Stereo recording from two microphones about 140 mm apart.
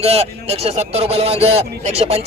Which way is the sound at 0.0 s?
45° right (ahead or behind).